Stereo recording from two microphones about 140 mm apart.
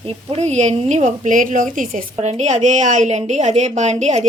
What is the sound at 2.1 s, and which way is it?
A woman's voice, 50° right (ahead or behind).